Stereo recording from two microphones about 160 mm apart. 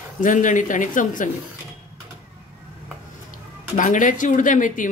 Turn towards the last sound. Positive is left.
turn(degrees=55)  # may be behind; listen again after turning